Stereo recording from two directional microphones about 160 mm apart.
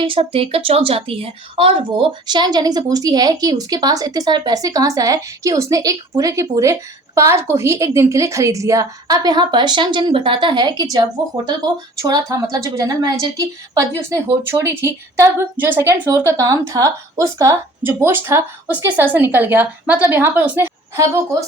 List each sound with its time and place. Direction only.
0.0 s a woman's voice: 35° right (ahead or behind)
14.5 s a woman's voice: 15° right (ahead or behind)